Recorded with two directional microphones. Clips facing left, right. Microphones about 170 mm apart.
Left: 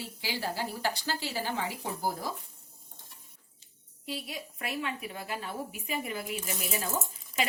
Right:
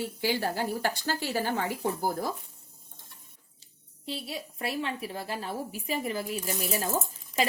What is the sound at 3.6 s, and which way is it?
A woman's voice, 30° right (ahead or behind).